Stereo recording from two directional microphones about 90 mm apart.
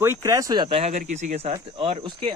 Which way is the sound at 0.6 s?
90° right.